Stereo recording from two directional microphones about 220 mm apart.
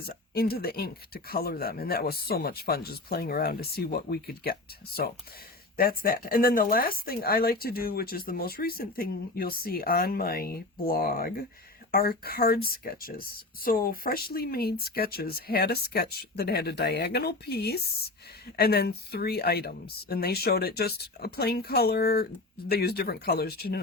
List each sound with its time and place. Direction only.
0.0 s speech: 45° left (ahead or behind)
5.7 s speech: 40° left (ahead or behind)